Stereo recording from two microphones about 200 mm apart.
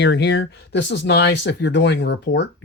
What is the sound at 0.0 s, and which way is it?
Speech, 60° left (ahead or behind).